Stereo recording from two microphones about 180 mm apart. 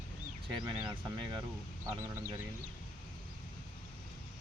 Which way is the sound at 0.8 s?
25° right (ahead or behind).